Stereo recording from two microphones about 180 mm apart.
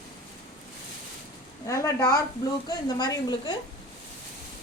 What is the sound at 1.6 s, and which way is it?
A woman's voice, 15° left (ahead or behind).